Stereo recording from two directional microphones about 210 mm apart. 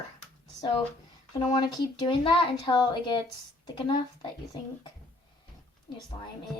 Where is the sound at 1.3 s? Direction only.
20° left (ahead or behind).